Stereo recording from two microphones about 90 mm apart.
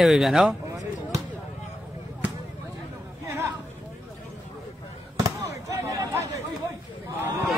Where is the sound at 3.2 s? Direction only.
30° right (ahead or behind).